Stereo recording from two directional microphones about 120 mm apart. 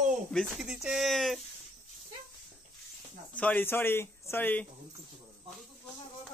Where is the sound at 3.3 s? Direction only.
15° left (ahead or behind).